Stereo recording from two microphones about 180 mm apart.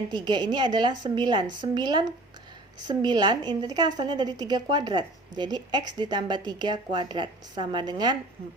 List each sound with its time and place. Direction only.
0.1 s a woman's voice: 25° right (ahead or behind)